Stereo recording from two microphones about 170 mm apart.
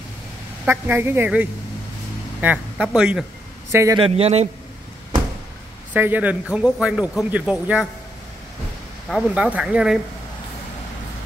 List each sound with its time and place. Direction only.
0.7 s speech: 10° right (ahead or behind)
3.7 s speech: 20° right (ahead or behind)
4.0 s a man's voice: 35° right (ahead or behind)
5.9 s speech: 10° right (ahead or behind)
9.1 s speech: 5° right (ahead or behind)